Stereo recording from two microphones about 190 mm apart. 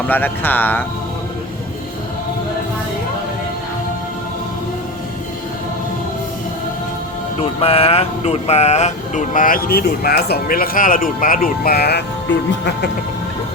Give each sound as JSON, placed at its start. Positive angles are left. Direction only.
{"t": 0.1, "sound": "speech", "side_deg": 10}
{"t": 7.6, "sound": "speech", "side_deg": 30}